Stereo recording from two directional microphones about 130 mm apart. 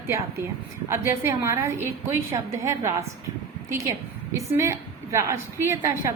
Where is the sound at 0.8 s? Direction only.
20° right (ahead or behind).